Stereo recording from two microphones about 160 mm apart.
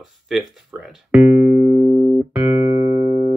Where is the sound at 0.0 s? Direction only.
Centre (ahead or behind).